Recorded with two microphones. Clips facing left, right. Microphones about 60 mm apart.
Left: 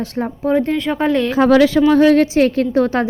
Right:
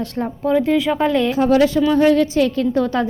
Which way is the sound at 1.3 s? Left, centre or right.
Left.